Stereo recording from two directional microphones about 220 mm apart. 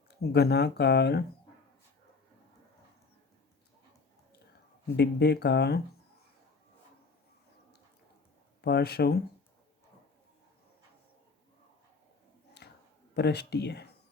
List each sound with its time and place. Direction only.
0.1 s speech: 45° left (ahead or behind)
4.9 s speech: 50° left (ahead or behind)
8.6 s speech: 45° left (ahead or behind)
12.6 s a sound: 50° left (ahead or behind)
13.1 s speech: 50° left (ahead or behind)